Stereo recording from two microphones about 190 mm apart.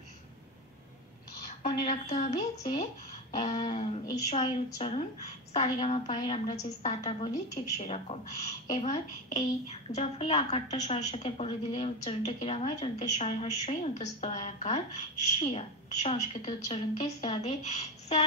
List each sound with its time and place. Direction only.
1.6 s a woman's voice: 40° left (ahead or behind)
2.3 s a woman's voice: 25° left (ahead or behind)